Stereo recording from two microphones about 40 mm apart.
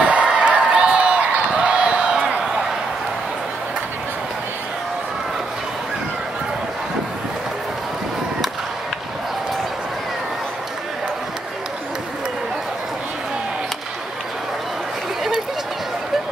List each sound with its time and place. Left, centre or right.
0.0 s crowd: right